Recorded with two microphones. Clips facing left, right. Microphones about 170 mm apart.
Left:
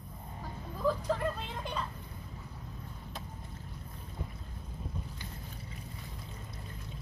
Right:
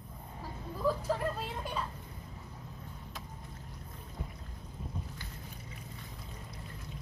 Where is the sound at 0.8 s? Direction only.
5° right (ahead or behind).